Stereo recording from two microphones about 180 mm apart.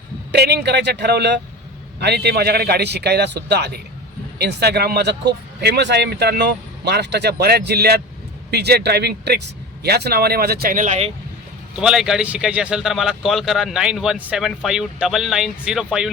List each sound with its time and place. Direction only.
0.3 s speech: 65° right (ahead or behind); by 11.1 s 40° right (ahead or behind)
11.8 s a man's voice: 5° right (ahead or behind)